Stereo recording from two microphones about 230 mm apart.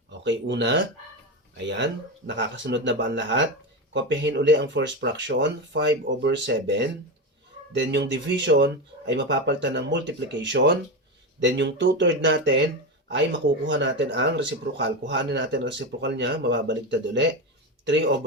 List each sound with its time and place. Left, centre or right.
0.1 s speech: right
13.7 s speech: right